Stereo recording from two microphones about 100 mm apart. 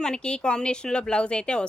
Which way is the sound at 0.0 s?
10° left (ahead or behind).